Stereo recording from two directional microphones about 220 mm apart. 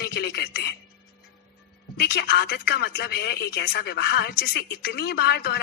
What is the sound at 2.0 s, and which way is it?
Speech, 45° left (ahead or behind).